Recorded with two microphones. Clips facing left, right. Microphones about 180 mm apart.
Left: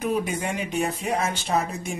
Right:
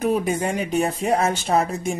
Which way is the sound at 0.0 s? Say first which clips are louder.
Right 4 dB; 45° right (ahead or behind).